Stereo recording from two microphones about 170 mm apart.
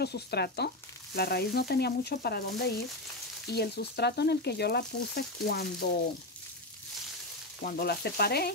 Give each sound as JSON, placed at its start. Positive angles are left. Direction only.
{"t": 0.0, "sound": "frying", "side_deg": 75}
{"t": 7.6, "sound": "frying", "side_deg": 65}